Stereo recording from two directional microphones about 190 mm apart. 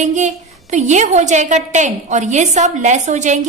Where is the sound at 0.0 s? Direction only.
40° right (ahead or behind).